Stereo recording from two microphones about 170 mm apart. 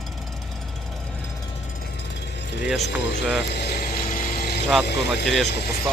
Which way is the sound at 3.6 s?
65° left (ahead or behind).